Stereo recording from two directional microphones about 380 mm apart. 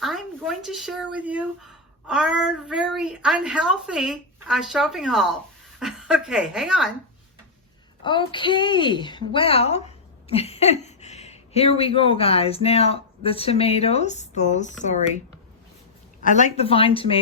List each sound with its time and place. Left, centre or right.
0.0 s speech: centre
8.0 s a woman's voice: centre
16.2 s a woman's voice: centre